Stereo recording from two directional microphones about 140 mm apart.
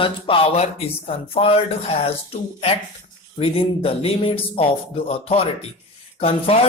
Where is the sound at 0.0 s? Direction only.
40° left (ahead or behind).